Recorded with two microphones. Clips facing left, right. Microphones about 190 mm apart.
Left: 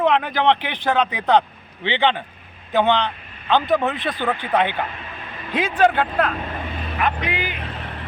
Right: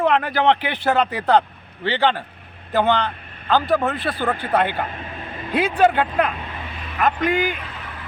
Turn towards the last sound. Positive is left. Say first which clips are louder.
# left 4 dB
turn(degrees=35)  # may be behind; listen again after turning